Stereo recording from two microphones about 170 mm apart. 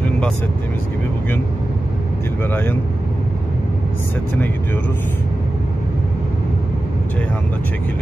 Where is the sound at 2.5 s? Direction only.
10° left (ahead or behind).